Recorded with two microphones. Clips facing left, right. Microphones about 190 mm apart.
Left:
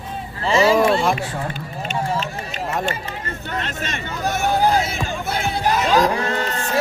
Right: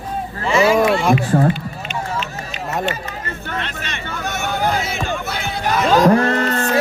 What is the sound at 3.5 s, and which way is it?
Hubbub, 40° left (ahead or behind).